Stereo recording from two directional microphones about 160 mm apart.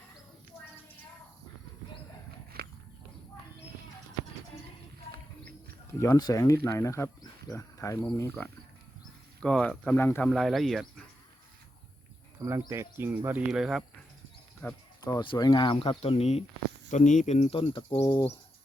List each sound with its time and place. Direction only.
2.5 s walk: 70° right (ahead or behind)
5.1 s a sound: 70° right (ahead or behind)
5.9 s speech: 20° left (ahead or behind); by 11.0 s centre (ahead or behind)
12.5 s speech: 15° right (ahead or behind)
14.6 s speech: 10° left (ahead or behind)
15.0 s speech: 30° left (ahead or behind)